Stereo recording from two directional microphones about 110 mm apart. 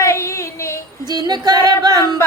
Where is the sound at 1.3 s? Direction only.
40° right (ahead or behind).